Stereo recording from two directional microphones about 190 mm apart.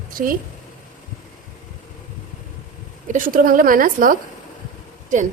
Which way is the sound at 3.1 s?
45° right (ahead or behind).